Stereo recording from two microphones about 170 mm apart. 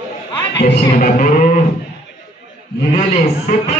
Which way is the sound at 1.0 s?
45° left (ahead or behind).